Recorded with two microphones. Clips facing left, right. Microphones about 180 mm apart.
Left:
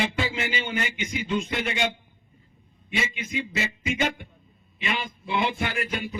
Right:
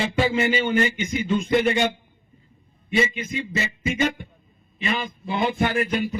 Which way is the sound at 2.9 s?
45° right (ahead or behind).